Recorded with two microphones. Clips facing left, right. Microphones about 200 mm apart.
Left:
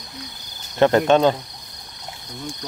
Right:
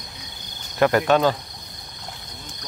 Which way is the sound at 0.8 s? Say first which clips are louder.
Left 3 dB; 25° left (ahead or behind).